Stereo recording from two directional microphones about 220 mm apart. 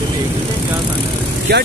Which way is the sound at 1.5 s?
45° right (ahead or behind).